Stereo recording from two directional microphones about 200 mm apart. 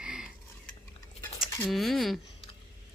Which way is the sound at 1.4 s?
15° left (ahead or behind).